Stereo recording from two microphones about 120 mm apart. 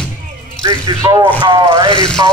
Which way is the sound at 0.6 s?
35° right (ahead or behind).